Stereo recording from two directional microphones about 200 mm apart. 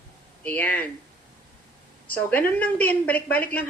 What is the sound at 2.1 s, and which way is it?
A woman's voice, 10° left (ahead or behind).